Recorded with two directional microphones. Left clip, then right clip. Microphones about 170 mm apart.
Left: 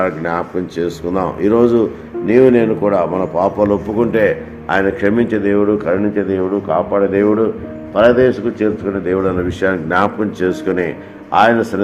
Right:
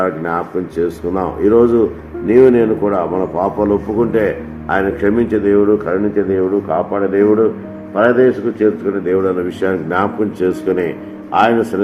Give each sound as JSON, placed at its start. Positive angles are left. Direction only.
{"t": 0.0, "sound": "speech", "side_deg": 50}